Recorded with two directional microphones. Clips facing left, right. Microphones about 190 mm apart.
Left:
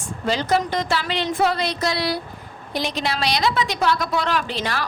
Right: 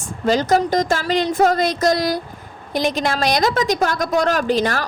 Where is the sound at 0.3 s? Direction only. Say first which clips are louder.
Right 5 dB; 45° right (ahead or behind).